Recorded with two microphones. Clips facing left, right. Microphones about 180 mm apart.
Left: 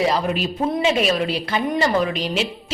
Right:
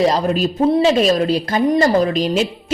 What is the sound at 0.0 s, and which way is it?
A woman's voice, 40° right (ahead or behind).